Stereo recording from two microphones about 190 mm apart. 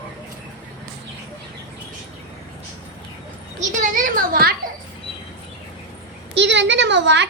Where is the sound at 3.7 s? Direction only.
45° right (ahead or behind).